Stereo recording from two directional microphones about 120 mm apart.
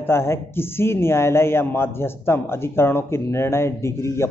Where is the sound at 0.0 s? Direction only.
20° left (ahead or behind).